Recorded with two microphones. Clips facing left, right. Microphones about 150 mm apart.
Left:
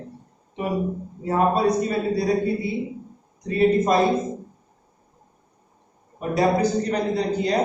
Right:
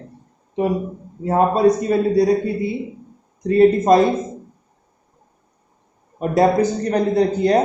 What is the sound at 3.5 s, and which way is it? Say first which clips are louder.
Speech: right 6 dB; 40° right (ahead or behind).